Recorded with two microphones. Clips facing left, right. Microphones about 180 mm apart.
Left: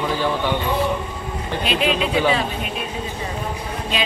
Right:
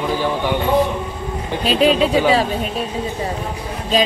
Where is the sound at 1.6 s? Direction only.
35° right (ahead or behind).